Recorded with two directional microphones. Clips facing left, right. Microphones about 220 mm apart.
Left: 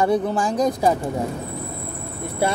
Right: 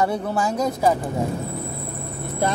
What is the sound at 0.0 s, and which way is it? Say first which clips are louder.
Speech: left 3 dB; 15° left (ahead or behind).